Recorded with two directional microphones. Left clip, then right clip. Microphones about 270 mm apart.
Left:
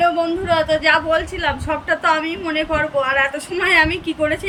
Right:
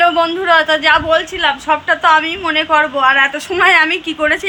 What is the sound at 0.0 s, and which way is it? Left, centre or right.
A woman's voice, centre.